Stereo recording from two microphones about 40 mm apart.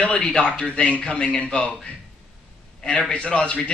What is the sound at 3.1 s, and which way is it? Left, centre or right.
Speech, left.